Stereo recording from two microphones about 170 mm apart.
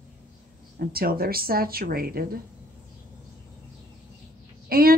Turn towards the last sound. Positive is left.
turn(degrees=-60)  # may be behind; listen again after turning